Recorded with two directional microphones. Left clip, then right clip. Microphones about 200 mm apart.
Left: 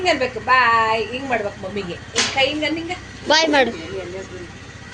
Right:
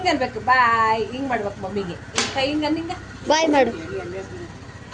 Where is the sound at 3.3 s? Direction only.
10° right (ahead or behind).